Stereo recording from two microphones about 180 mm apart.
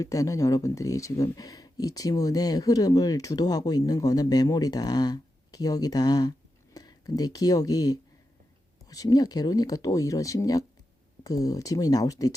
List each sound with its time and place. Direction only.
0.0 s speech: 20° left (ahead or behind)